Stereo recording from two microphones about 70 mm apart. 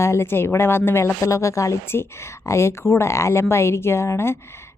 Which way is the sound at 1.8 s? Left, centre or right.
Left.